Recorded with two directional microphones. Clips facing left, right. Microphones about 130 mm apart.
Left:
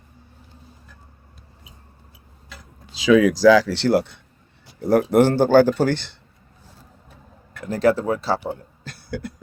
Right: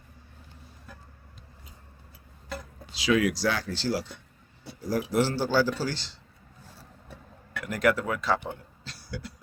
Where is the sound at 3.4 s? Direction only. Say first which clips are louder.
Left 14 dB; 90° left; by 6.2 s 60° left (ahead or behind).